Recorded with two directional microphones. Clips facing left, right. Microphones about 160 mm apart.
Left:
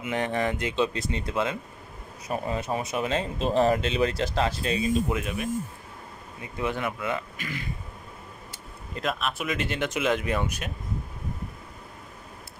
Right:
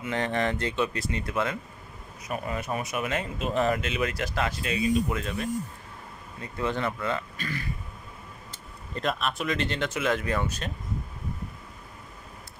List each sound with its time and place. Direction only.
0.0 s speech: 15° left (ahead or behind); by 5.1 s 35° left (ahead or behind)
5.1 s speech: 15° left (ahead or behind)
8.5 s speech: 5° left (ahead or behind)